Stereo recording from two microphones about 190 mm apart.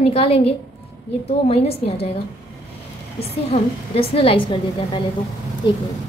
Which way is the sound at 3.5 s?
30° left (ahead or behind).